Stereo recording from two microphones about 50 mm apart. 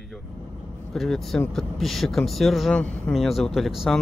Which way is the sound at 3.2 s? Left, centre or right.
Centre.